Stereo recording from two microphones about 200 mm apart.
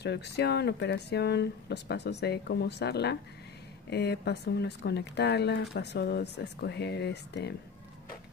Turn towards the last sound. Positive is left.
turn(degrees=55)  # may be behind; listen again after turning